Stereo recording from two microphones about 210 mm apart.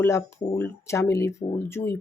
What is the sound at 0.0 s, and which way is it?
Speech, 15° left (ahead or behind).